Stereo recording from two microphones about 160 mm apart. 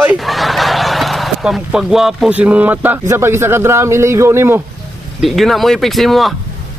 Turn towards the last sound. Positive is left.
turn(degrees=0)  # may be behind; listen again after turning